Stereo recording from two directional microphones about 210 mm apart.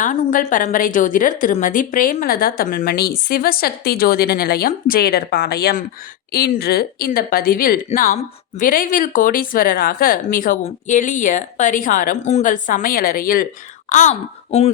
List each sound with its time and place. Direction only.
0.0 s a woman's voice: 35° left (ahead or behind)